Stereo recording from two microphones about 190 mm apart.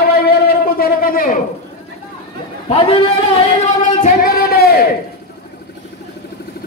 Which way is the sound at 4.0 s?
50° left (ahead or behind).